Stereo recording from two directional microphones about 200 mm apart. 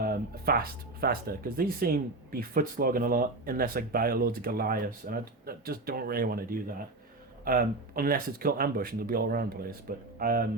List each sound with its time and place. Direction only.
0.0 s speech: 50° right (ahead or behind)